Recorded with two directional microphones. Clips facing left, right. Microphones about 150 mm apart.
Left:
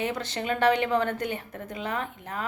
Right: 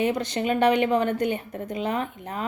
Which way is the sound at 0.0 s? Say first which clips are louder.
Right 6 dB; 15° right (ahead or behind).